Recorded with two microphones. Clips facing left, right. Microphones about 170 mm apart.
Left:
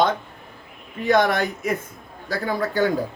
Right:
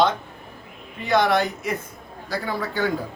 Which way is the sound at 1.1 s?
50° left (ahead or behind).